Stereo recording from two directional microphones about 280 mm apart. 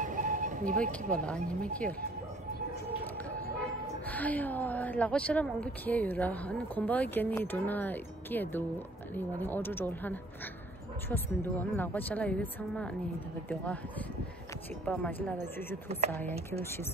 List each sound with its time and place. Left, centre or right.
0.0 s a sound: right
1.1 s a woman's voice: centre
4.1 s a woman's voice: centre